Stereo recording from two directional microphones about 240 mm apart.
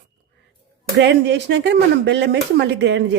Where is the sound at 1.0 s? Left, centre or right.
Right.